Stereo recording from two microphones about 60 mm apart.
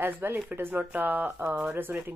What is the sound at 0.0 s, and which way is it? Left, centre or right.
Speech, right.